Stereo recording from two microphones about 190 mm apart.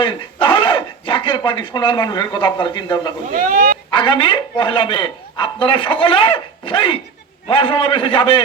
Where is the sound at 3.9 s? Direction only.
25° left (ahead or behind).